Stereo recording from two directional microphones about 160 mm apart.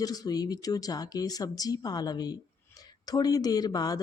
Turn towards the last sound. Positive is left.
turn(degrees=25)  # may be behind; listen again after turning